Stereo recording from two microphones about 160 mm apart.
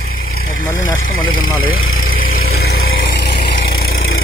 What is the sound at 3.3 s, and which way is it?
Vehicle, 30° left (ahead or behind).